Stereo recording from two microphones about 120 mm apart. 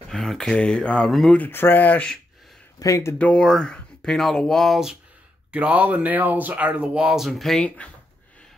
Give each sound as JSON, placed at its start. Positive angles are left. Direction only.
{"t": 0.1, "sound": "speech", "side_deg": 0}
{"t": 1.4, "sound": "speech", "side_deg": 20}
{"t": 2.8, "sound": "speech", "side_deg": 25}
{"t": 3.2, "sound": "speech", "side_deg": 10}
{"t": 5.5, "sound": "speech", "side_deg": -10}